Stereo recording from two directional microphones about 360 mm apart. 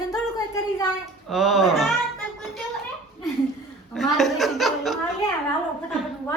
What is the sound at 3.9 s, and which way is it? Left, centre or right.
Speech, centre.